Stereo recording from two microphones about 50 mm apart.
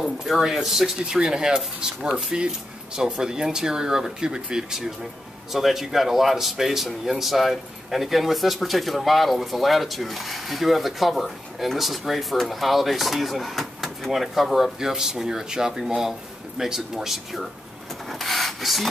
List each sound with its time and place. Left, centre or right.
0.0 s speech: centre
18.0 s rub: centre